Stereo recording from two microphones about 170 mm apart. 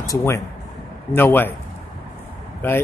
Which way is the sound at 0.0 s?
15° left (ahead or behind).